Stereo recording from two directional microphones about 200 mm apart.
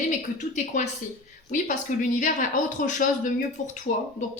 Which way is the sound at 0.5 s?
35° left (ahead or behind).